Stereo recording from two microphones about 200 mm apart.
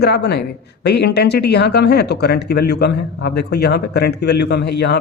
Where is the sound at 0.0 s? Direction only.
55° left (ahead or behind).